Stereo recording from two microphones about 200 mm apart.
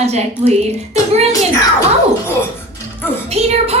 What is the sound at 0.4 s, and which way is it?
Speech, 30° right (ahead or behind).